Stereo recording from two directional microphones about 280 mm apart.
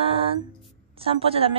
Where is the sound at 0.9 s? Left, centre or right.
Centre.